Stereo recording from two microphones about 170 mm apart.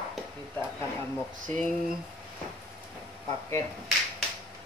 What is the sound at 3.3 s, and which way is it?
Speech, 20° left (ahead or behind).